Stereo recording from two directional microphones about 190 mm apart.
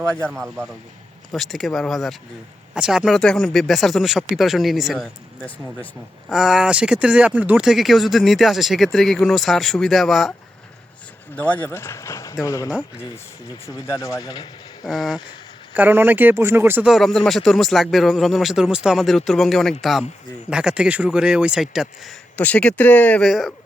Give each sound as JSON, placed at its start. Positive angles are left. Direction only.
{"t": 0.1, "sound": "speech", "side_deg": 5}
{"t": 0.4, "sound": "a man's voice", "side_deg": -15}
{"t": 1.3, "sound": "speech", "side_deg": 0}
{"t": 11.3, "sound": "speech", "side_deg": 10}
{"t": 14.8, "sound": "speech", "side_deg": 0}